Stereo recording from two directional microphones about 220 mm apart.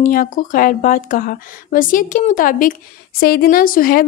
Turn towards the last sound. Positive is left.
turn(degrees=40)  # may be behind; listen again after turning